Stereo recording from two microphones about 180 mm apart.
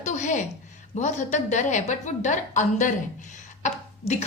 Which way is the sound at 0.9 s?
40° left (ahead or behind).